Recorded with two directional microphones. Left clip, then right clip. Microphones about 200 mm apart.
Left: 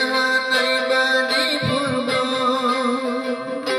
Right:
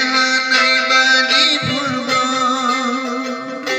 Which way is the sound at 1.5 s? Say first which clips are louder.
Right 3 dB; 40° left (ahead or behind).